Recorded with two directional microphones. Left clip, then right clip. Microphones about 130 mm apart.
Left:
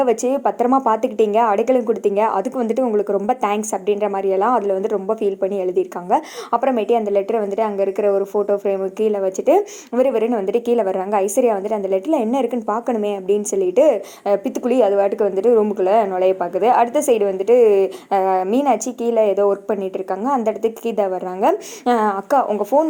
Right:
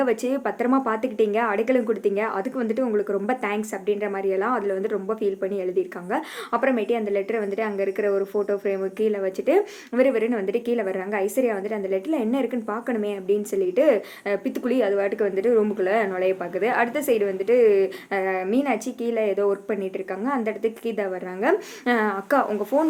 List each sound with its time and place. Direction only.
0.0 s speech: 25° left (ahead or behind)
2.8 s a woman's voice: 5° left (ahead or behind)
3.2 s speech: 35° left (ahead or behind)
6.1 s speech: 30° left (ahead or behind)